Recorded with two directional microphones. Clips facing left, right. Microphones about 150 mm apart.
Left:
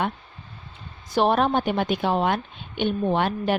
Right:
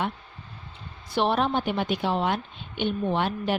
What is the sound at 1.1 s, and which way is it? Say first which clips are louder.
A woman's voice: left 4 dB; 45° left (ahead or behind).